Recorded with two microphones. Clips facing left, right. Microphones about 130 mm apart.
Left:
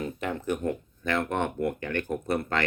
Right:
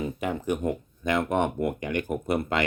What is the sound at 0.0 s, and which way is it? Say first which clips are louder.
Speech: right 2 dB; 10° right (ahead or behind).